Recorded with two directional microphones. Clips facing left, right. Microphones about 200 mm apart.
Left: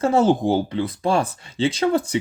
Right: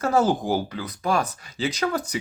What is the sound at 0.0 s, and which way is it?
Speech, 25° left (ahead or behind).